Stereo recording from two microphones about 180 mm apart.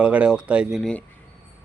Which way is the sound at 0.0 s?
5° right (ahead or behind).